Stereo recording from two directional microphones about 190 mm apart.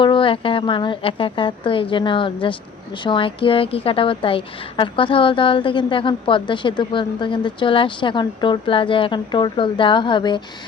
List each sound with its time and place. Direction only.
0.0 s a woman's voice: 25° left (ahead or behind)